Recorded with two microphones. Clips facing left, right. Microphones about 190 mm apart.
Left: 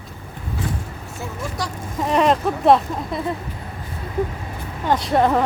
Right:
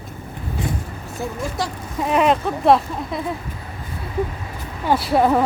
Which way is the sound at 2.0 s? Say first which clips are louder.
Even; 5° right (ahead or behind).